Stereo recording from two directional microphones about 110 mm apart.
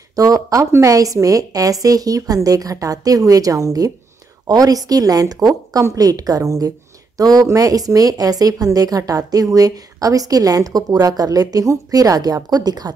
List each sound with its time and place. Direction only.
0.1 s speech: 35° right (ahead or behind)